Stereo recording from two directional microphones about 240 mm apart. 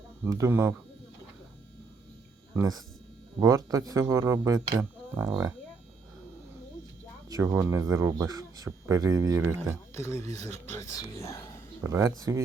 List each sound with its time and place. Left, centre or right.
0.3 s speech: centre
2.6 s speech: centre
7.3 s speech: centre
9.6 s speech: centre
11.8 s speech: centre